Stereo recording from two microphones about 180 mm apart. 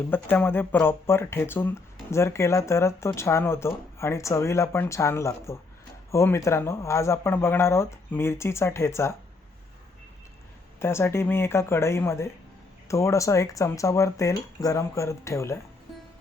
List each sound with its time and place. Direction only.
0.1 s speech: 10° left (ahead or behind)
10.8 s speech: 15° left (ahead or behind)